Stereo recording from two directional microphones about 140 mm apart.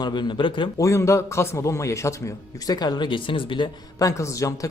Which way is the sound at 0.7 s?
20° left (ahead or behind).